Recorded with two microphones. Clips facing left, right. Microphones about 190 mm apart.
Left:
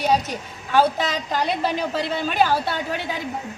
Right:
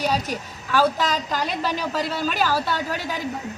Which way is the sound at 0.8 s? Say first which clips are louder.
Left 1 dB; 45° right (ahead or behind).